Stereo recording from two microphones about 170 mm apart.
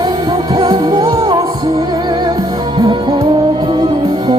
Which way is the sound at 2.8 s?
30° right (ahead or behind).